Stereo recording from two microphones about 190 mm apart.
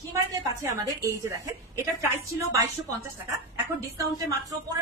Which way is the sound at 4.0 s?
15° right (ahead or behind).